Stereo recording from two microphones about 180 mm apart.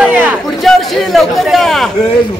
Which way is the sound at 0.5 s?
Centre (ahead or behind).